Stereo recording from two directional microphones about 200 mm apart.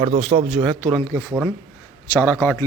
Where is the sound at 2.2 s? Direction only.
10° left (ahead or behind).